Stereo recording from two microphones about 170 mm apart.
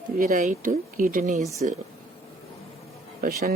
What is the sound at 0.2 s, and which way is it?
A woman's voice, 50° right (ahead or behind).